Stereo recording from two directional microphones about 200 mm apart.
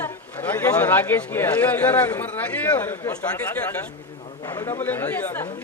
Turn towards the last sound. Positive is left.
turn(degrees=15)  # may be behind; listen again after turning